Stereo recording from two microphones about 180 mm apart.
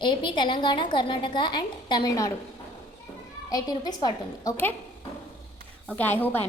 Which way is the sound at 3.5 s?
20° left (ahead or behind).